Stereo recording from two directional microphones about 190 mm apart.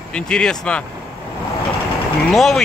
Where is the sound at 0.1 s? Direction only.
5° left (ahead or behind).